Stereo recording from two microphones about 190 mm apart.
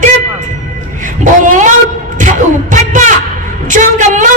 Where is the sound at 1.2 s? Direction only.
40° right (ahead or behind).